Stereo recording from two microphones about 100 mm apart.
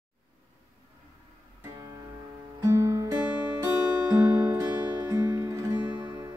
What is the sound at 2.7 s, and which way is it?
Music, 30° right (ahead or behind).